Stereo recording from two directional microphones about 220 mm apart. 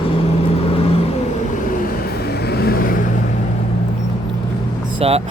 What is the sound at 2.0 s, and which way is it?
Vehicle, 45° left (ahead or behind).